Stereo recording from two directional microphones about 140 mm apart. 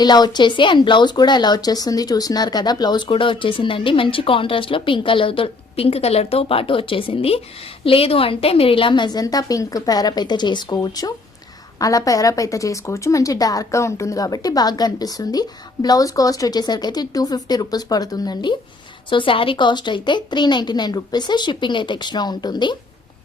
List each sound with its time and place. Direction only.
0.0 s a woman's voice: 30° left (ahead or behind)